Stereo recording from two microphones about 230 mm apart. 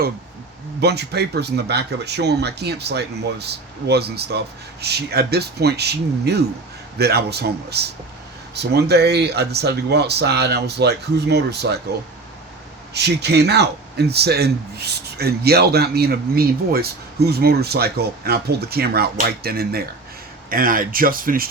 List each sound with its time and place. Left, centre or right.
0.8 s a man's voice: right
12.9 s a man's voice: right